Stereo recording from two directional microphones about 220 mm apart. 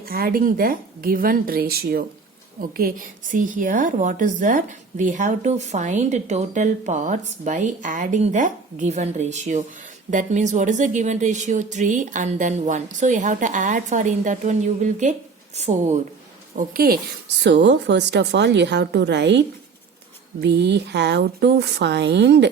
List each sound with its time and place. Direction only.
0.0 s a woman's voice: 40° right (ahead or behind)
16.6 s a woman's voice: 40° right (ahead or behind)